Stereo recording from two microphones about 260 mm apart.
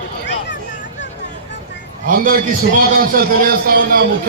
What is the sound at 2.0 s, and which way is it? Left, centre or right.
A man's voice, right.